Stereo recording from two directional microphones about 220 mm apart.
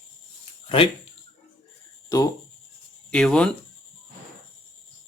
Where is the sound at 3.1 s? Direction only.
5° left (ahead or behind).